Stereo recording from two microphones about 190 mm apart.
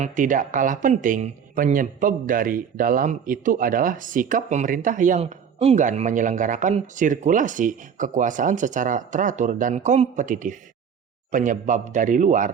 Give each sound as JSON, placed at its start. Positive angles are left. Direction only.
{"t": 0.0, "sound": "speech", "side_deg": -45}